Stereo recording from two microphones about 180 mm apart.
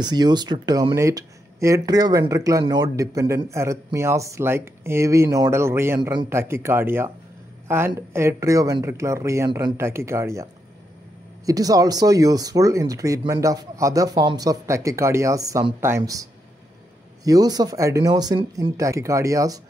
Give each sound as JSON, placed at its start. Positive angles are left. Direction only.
{"t": 0.0, "sound": "speech", "side_deg": -25}